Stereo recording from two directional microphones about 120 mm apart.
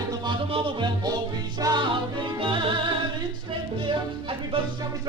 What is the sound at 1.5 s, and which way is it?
Music, 35° right (ahead or behind).